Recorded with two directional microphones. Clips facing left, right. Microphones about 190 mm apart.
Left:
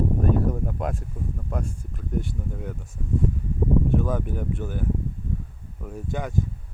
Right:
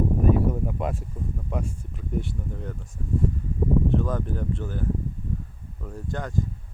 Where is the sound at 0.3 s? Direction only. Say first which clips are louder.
Right 1 dB; 5° right (ahead or behind).